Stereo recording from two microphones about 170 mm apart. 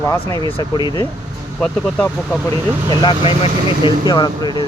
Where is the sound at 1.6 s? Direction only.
5° left (ahead or behind).